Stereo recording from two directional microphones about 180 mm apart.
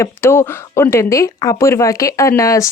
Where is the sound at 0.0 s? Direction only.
15° left (ahead or behind).